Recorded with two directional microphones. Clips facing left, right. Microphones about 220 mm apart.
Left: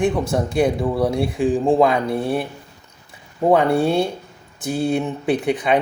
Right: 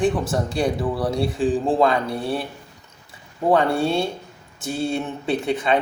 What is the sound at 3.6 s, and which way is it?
Speech, 20° left (ahead or behind).